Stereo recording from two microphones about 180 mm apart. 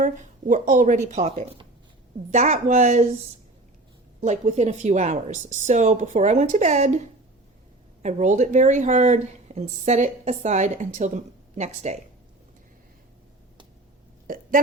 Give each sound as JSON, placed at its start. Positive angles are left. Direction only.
{"t": 0.0, "sound": "speech", "side_deg": -45}
{"t": 4.2, "sound": "speech", "side_deg": -40}
{"t": 14.3, "sound": "burping", "side_deg": -50}